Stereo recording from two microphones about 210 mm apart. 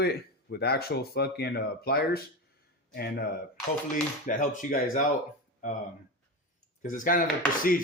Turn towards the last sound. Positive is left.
turn(degrees=40)  # may be behind; listen again after turning